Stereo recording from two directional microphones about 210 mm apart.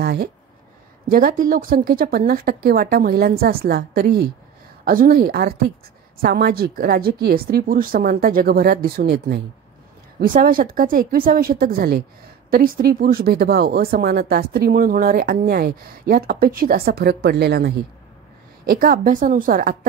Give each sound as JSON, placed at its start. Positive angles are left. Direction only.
{"t": 0.0, "sound": "a woman's voice", "side_deg": -50}